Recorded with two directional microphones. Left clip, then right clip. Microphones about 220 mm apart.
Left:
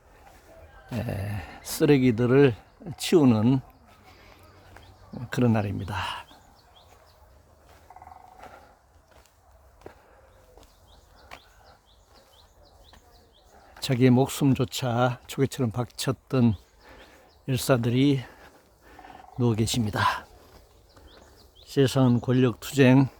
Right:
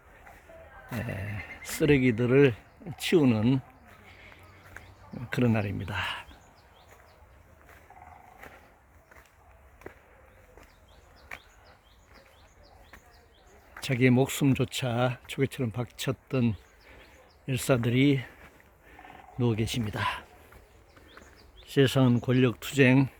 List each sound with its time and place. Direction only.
0.9 s speech: 25° left (ahead or behind)
5.3 s speech: 20° left (ahead or behind)
9.9 s a sound: 5° right (ahead or behind)
13.8 s speech: 25° left (ahead or behind)
21.7 s speech: 15° left (ahead or behind)